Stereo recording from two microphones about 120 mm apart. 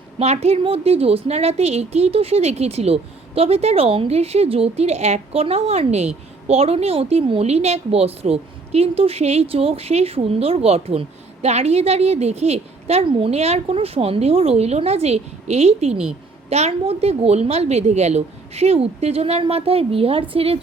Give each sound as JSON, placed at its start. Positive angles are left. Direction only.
{"t": 0.2, "sound": "a woman's voice", "side_deg": -60}